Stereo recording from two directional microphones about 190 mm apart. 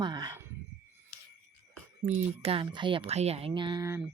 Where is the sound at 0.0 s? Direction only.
25° right (ahead or behind).